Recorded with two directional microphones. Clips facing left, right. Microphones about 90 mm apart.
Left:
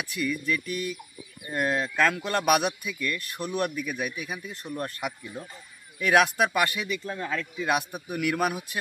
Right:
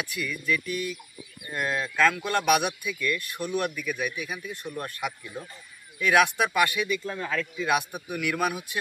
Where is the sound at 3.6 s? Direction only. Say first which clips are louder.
Left 1 dB; 20° left (ahead or behind).